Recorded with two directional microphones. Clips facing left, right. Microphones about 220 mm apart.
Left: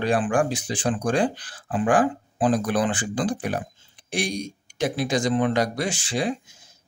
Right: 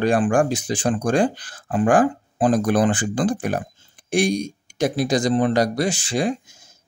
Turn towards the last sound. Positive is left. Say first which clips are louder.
# right 3 dB
turn(degrees=-45)  # may be behind; listen again after turning